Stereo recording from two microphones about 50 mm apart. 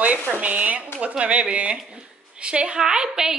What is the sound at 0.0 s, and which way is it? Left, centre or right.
A woman's voice, right.